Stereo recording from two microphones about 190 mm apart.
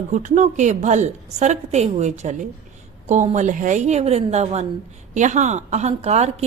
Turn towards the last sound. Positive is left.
turn(degrees=-35)  # may be behind; listen again after turning